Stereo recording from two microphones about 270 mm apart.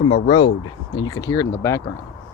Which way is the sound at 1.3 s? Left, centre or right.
Centre.